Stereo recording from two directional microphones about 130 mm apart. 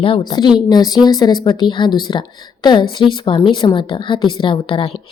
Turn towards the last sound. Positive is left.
turn(degrees=45)  # may be behind; listen again after turning